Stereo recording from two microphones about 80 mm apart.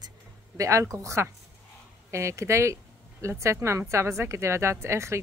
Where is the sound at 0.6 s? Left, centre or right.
Right.